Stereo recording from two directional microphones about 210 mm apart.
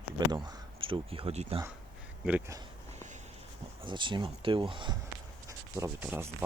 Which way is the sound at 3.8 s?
25° right (ahead or behind).